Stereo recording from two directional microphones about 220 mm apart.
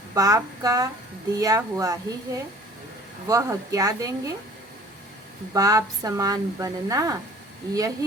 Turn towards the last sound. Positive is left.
turn(degrees=-15)  # may be behind; listen again after turning